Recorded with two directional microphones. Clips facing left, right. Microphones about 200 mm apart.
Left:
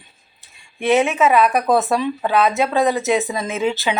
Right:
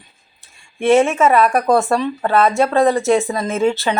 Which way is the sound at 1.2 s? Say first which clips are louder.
Right 2 dB; centre (ahead or behind).